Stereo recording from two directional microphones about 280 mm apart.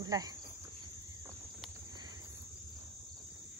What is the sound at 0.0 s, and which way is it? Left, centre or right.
Speech, centre.